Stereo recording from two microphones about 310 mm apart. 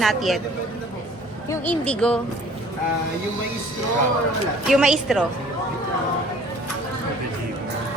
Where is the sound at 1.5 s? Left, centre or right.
Centre.